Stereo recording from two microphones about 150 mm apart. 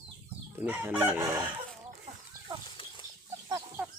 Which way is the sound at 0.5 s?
10° right (ahead or behind).